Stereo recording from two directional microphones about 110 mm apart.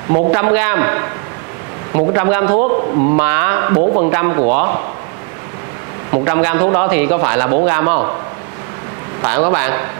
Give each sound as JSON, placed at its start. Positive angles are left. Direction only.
{"t": 0.1, "sound": "a man's voice", "side_deg": -25}
{"t": 6.2, "sound": "a man's voice", "side_deg": -25}
{"t": 9.2, "sound": "a man's voice", "side_deg": -25}